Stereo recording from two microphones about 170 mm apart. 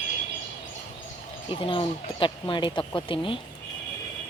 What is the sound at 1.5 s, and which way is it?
A woman's voice, 30° left (ahead or behind).